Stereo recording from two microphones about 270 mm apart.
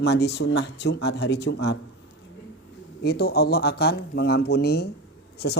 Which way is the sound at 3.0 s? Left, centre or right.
Left.